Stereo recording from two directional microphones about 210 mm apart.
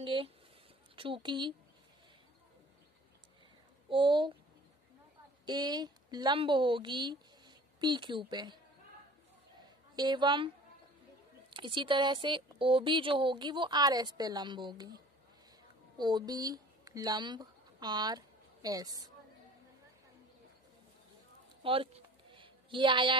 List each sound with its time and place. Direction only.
0.0 s speech: 25° right (ahead or behind)
3.9 s speech: 20° right (ahead or behind)
5.4 s a woman's voice: 20° right (ahead or behind)
9.9 s speech: 20° right (ahead or behind)
11.5 s speech: 25° right (ahead or behind)
16.0 s speech: 20° right (ahead or behind)
21.6 s a sound: 25° right (ahead or behind)